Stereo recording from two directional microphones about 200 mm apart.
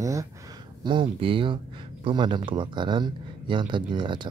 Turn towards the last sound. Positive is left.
turn(degrees=-25)  # may be behind; listen again after turning